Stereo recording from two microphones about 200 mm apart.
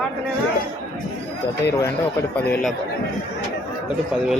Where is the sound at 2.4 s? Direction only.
10° left (ahead or behind).